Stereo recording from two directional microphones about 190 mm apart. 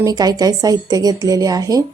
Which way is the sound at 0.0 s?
20° right (ahead or behind).